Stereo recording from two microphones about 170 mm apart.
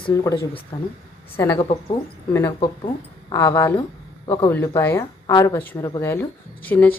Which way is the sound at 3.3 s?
20° left (ahead or behind).